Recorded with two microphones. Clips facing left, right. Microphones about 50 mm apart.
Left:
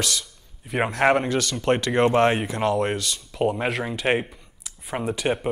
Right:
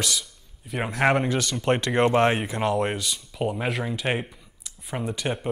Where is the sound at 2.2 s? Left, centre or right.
Centre.